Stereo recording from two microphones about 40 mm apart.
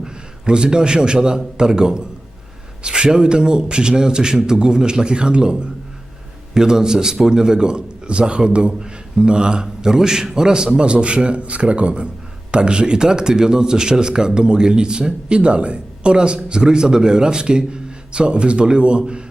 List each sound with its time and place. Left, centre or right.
0.0 s a man's voice: right